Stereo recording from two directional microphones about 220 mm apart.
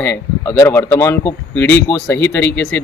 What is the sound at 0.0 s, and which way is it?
Speech, 10° left (ahead or behind).